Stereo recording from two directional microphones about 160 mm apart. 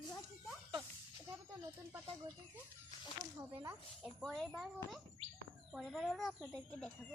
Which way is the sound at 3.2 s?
20° right (ahead or behind).